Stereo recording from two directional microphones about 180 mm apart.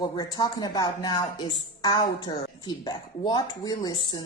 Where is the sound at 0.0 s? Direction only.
20° left (ahead or behind).